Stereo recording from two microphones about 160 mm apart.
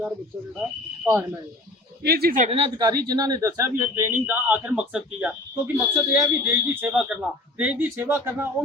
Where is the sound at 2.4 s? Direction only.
40° right (ahead or behind).